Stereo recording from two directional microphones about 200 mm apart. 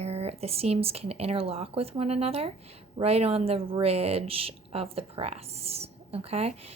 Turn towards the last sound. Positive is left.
turn(degrees=-30)  # may be behind; listen again after turning